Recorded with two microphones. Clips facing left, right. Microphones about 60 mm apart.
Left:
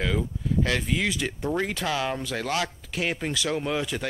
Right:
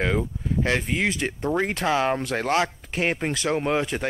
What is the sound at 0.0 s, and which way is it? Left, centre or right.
Speech, right.